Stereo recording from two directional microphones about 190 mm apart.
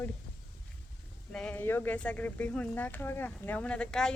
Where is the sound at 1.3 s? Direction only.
5° left (ahead or behind).